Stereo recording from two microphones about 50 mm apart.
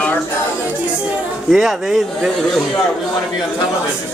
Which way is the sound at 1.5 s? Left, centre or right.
Centre.